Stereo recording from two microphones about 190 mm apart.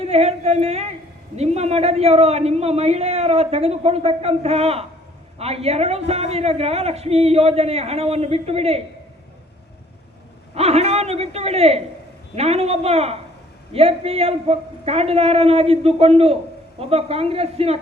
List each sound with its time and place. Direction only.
0.0 s a man's voice: 35° right (ahead or behind)
10.5 s a man's voice: 35° right (ahead or behind)